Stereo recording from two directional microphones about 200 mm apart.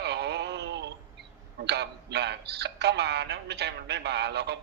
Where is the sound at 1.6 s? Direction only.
55° right (ahead or behind).